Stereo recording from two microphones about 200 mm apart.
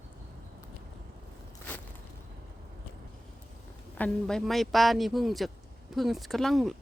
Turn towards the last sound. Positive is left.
turn(degrees=0)  # may be behind; listen again after turning